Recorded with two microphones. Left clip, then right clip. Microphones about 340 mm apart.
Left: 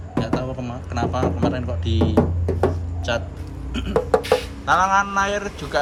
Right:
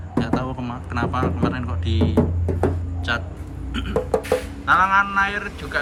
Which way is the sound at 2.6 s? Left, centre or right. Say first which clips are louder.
Left 1 dB; centre.